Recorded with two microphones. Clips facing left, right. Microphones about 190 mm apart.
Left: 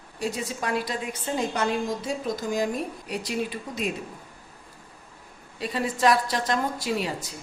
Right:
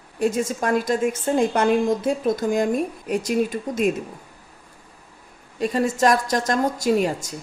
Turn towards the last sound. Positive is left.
turn(degrees=-45)  # may be behind; listen again after turning